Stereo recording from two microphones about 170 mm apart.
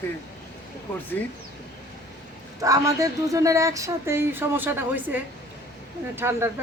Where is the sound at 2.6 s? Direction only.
20° right (ahead or behind).